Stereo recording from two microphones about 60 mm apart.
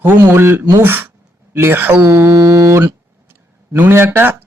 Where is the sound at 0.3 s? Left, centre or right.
Right.